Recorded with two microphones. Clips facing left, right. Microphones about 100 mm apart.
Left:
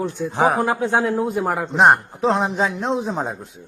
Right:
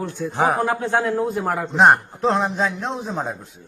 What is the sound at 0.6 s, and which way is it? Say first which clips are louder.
A man's voice: left 1 dB; 15° left (ahead or behind).